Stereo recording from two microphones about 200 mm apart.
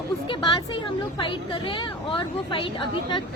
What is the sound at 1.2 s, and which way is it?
A woman's voice, 25° left (ahead or behind).